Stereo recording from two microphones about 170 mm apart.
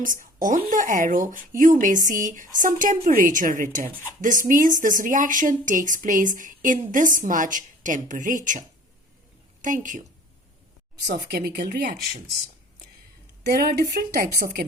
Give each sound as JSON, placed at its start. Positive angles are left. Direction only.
{"t": 0.0, "sound": "speech", "side_deg": -55}
{"t": 11.3, "sound": "a woman's voice", "side_deg": -65}
{"t": 13.4, "sound": "a woman's voice", "side_deg": -65}